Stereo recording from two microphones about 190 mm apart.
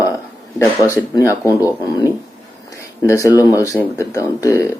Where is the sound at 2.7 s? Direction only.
15° left (ahead or behind).